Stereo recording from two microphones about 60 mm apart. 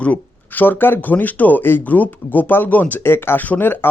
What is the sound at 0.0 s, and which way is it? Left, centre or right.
Speech, left.